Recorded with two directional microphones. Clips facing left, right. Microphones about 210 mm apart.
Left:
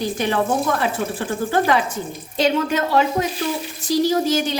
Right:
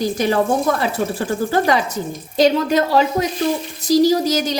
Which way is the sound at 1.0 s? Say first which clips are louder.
Right 3 dB; 40° right (ahead or behind).